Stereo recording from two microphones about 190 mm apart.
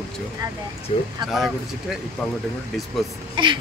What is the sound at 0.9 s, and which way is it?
Speech, 35° left (ahead or behind).